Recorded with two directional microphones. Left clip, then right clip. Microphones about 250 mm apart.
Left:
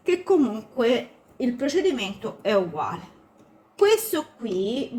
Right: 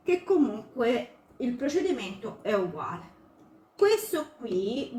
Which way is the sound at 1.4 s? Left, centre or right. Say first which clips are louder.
Left 5 dB; left.